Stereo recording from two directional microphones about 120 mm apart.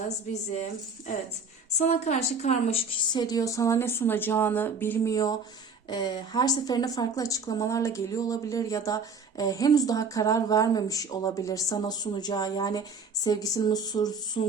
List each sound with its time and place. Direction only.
2.0 s a woman's voice: 70° left (ahead or behind)
3.1 s a woman's voice: 35° left (ahead or behind)